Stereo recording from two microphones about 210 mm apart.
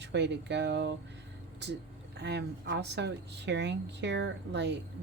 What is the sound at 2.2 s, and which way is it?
Speech, 55° right (ahead or behind).